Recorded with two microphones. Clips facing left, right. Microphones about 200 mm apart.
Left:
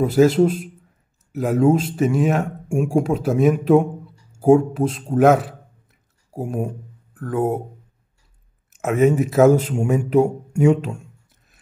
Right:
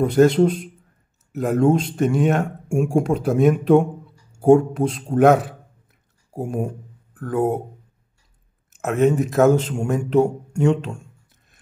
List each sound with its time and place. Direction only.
0.0 s a man's voice: 5° left (ahead or behind)
8.8 s a man's voice: 5° left (ahead or behind)